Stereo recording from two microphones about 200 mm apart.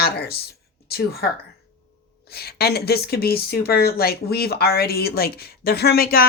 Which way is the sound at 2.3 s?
50° left (ahead or behind).